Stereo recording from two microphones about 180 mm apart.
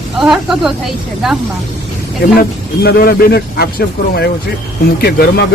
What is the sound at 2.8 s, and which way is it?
Speech, 55° left (ahead or behind).